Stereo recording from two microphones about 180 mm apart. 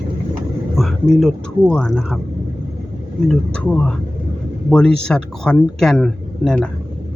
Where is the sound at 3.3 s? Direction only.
5° left (ahead or behind).